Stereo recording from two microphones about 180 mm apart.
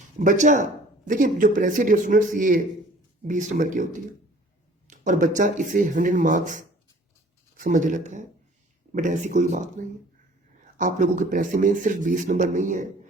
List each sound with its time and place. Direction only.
0.2 s a man's voice: 45° right (ahead or behind)
4.9 s a man's voice: 45° right (ahead or behind)